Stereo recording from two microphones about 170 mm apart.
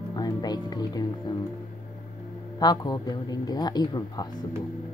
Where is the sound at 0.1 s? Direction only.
25° left (ahead or behind).